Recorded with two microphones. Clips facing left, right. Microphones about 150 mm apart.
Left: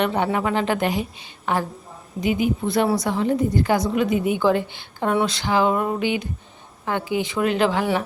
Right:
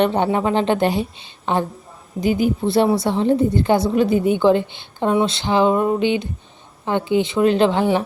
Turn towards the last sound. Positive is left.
turn(degrees=-30)  # may be behind; listen again after turning